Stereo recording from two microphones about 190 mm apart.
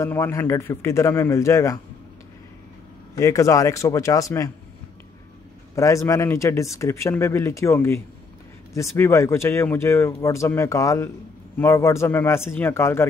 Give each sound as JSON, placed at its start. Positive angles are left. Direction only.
{"t": 0.0, "sound": "speech", "side_deg": 15}
{"t": 3.2, "sound": "speech", "side_deg": 15}
{"t": 5.8, "sound": "speech", "side_deg": 15}